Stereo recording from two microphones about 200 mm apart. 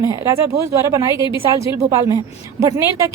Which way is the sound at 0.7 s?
15° right (ahead or behind).